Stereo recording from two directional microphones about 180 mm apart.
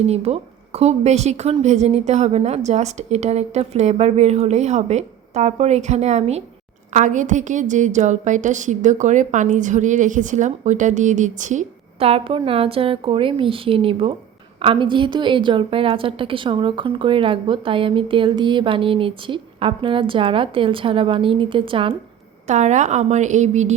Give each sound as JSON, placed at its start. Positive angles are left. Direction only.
{"t": 0.0, "sound": "a woman's voice", "side_deg": -35}
{"t": 22.4, "sound": "a woman's voice", "side_deg": -40}